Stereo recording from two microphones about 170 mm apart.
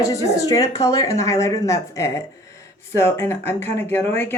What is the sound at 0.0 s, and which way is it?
Speech, 20° left (ahead or behind).